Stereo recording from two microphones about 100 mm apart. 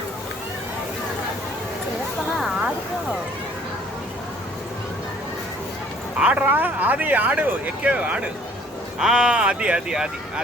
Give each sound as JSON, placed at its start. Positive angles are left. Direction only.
{"t": 6.1, "sound": "speech", "side_deg": -15}